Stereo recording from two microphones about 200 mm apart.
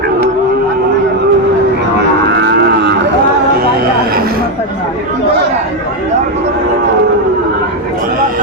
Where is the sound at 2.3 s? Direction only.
60° right (ahead or behind).